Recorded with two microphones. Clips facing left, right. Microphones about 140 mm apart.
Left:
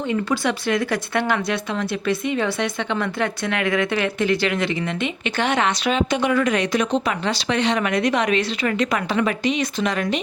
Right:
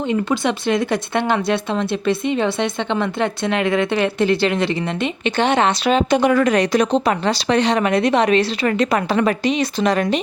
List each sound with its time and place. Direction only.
0.1 s speech: 20° right (ahead or behind)